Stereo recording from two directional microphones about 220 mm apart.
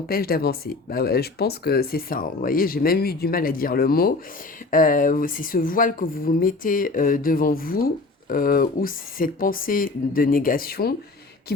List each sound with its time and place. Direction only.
0.1 s speech: 45° left (ahead or behind)